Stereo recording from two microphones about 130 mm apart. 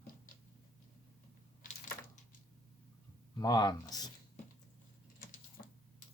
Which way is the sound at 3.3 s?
30° left (ahead or behind).